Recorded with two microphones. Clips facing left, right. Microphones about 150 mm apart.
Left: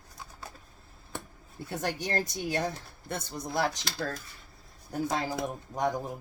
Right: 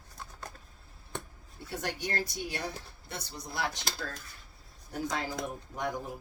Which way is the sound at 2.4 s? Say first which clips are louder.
Left 6 dB; 45° left (ahead or behind).